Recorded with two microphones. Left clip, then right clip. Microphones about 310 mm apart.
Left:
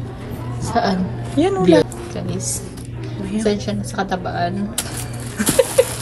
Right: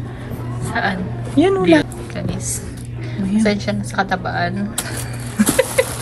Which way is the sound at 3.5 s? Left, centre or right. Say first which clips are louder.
Right 3 dB; centre.